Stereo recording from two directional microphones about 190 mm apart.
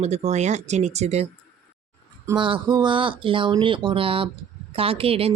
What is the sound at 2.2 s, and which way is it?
A woman's voice, 25° right (ahead or behind).